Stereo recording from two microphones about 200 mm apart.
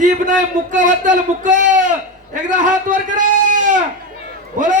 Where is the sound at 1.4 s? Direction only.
40° right (ahead or behind).